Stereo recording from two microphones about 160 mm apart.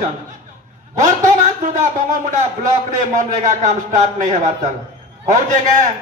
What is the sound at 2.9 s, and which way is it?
A man's voice, 50° right (ahead or behind).